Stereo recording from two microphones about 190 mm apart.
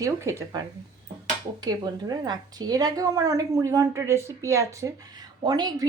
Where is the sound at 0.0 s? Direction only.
15° right (ahead or behind).